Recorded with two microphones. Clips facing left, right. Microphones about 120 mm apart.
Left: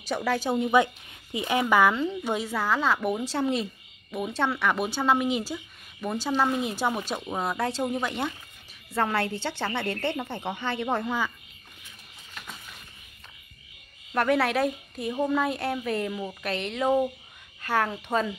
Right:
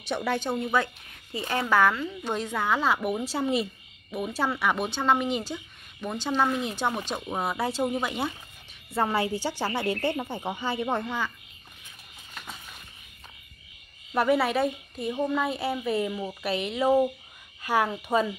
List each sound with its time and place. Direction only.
0.0 s speech: centre (ahead or behind)
0.5 s a woman's voice: 15° left (ahead or behind)
7.2 s a woman's voice: 5° right (ahead or behind)
11.1 s speech: 10° left (ahead or behind)
14.1 s a woman's voice: 5° right (ahead or behind)